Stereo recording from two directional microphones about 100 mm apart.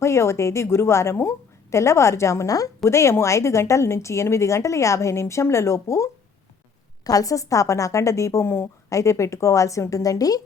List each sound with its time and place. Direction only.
0.0 s a woman's voice: 30° left (ahead or behind)